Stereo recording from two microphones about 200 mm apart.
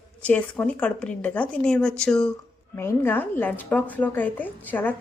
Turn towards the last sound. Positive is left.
turn(degrees=10)  # may be behind; listen again after turning